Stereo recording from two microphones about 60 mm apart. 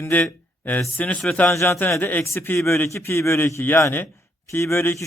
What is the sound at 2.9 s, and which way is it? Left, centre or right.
Speech, left.